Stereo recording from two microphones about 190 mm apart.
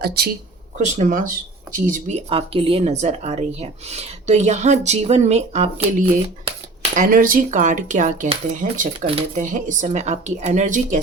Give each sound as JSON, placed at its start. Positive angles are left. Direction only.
{"t": 0.2, "sound": "speech", "side_deg": -55}
{"t": 0.8, "sound": "speech", "side_deg": -40}